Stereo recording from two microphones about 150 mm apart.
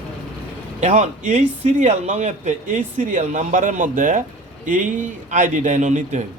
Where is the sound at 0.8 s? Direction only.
50° right (ahead or behind).